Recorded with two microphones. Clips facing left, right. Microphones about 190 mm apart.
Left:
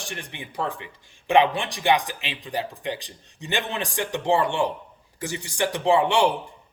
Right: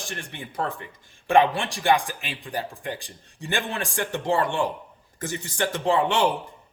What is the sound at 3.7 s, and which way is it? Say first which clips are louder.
A man's voice: left 1 dB; 15° left (ahead or behind).